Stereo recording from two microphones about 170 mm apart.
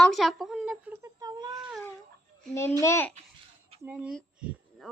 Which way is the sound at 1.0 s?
20° right (ahead or behind).